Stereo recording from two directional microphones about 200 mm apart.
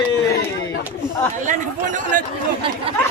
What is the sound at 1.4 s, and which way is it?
Speech, 40° right (ahead or behind).